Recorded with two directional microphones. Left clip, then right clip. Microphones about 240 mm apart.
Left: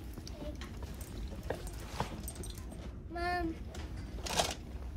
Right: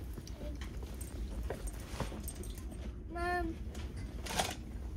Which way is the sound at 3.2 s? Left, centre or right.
Left.